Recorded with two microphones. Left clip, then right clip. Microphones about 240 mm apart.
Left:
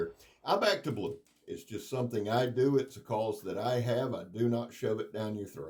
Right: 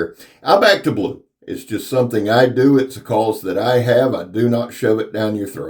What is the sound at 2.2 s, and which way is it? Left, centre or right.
Speech, left.